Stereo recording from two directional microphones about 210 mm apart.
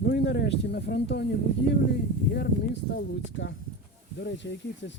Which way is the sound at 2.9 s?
60° left (ahead or behind).